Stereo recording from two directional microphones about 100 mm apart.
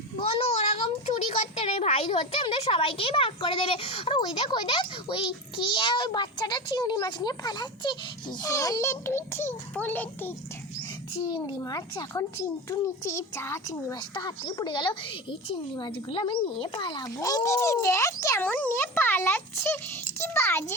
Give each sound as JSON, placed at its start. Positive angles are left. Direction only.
{"t": 0.2, "sound": "child singing", "side_deg": 90}
{"t": 1.3, "sound": "a sound", "side_deg": 80}
{"t": 2.0, "sound": "a child's voice", "side_deg": 55}
{"t": 4.4, "sound": "a child's voice", "side_deg": 50}
{"t": 8.4, "sound": "speech", "side_deg": 35}
{"t": 11.4, "sound": "speech", "side_deg": 45}
{"t": 13.1, "sound": "speech", "side_deg": 25}
{"t": 13.9, "sound": "a child's voice", "side_deg": 50}
{"t": 17.0, "sound": "speech", "side_deg": 35}
{"t": 18.4, "sound": "speech", "side_deg": 15}